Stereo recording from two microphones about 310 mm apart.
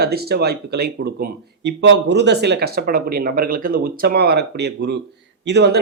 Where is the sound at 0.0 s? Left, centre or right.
Right.